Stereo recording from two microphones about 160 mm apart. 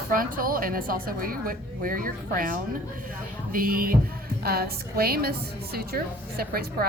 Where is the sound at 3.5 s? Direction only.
65° right (ahead or behind).